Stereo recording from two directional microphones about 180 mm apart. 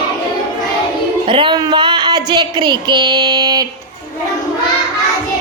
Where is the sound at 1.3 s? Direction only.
25° right (ahead or behind).